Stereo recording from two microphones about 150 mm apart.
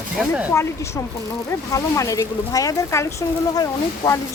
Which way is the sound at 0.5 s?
20° left (ahead or behind).